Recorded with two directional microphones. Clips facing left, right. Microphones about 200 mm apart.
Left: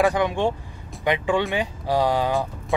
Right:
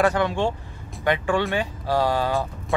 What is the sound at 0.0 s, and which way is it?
Speech, 15° left (ahead or behind).